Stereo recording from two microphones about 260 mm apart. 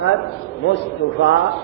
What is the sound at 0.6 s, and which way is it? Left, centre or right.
Speech, left.